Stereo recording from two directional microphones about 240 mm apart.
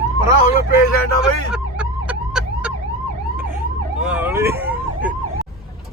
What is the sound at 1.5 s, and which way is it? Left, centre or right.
Emergency vehicle, centre.